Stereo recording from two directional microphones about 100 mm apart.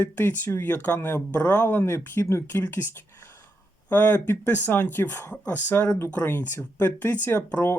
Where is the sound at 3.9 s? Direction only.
20° left (ahead or behind).